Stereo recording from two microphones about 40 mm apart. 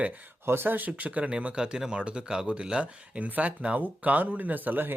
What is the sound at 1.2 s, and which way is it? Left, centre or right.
Speech, right.